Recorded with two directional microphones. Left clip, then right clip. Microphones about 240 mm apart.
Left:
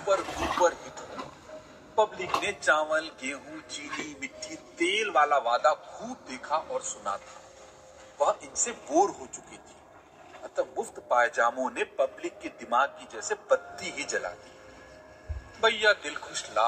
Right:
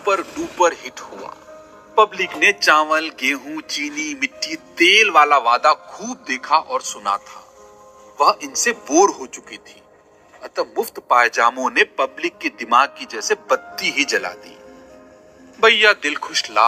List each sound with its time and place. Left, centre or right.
0.0 s a man's voice: right
8.2 s a man's voice: right
15.6 s a man's voice: right